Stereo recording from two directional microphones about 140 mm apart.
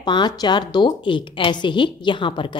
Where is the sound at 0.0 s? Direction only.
30° left (ahead or behind).